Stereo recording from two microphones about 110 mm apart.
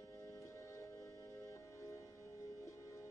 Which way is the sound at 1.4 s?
30° left (ahead or behind).